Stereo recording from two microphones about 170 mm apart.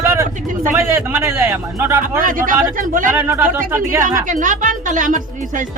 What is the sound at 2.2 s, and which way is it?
Speech, 55° right (ahead or behind).